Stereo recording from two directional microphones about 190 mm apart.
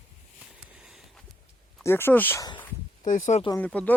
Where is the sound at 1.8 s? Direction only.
10° left (ahead or behind).